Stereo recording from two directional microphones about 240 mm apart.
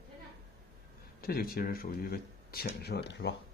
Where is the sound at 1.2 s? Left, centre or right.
Left.